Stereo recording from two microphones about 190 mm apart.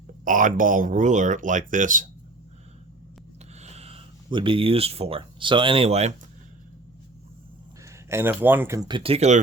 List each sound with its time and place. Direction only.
0.3 s speech: 45° right (ahead or behind)
3.6 s speech: 35° right (ahead or behind)
8.1 s speech: 10° right (ahead or behind); by 9.4 s 35° right (ahead or behind)